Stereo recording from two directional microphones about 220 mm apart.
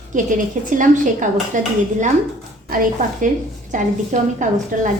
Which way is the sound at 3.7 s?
35° right (ahead or behind).